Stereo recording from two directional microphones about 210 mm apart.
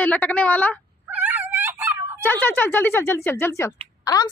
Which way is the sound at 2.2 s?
10° left (ahead or behind).